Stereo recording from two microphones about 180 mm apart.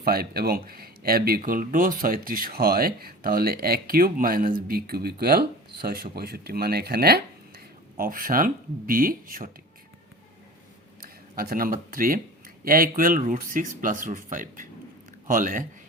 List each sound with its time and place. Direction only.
0.0 s speech: 55° right (ahead or behind)
11.3 s speech: 55° right (ahead or behind)